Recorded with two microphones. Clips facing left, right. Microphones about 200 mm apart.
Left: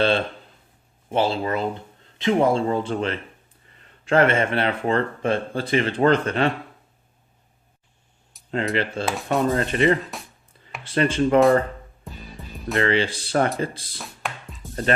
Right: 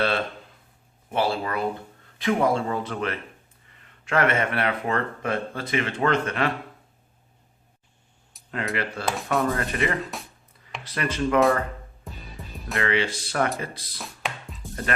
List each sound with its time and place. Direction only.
1.1 s speech: 25° left (ahead or behind)
8.4 s a sound: centre (ahead or behind)
8.7 s speech: 25° left (ahead or behind)
9.0 s speech: centre (ahead or behind)
9.4 s speech: 25° left (ahead or behind)
10.0 s speech: centre (ahead or behind)
10.8 s speech: 30° left (ahead or behind)
12.0 s music: centre (ahead or behind)
12.8 s speech: 30° left (ahead or behind)
14.0 s music: centre (ahead or behind)